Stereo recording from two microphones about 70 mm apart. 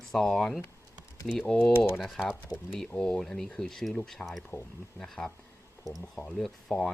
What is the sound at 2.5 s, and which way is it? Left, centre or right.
Speech, left.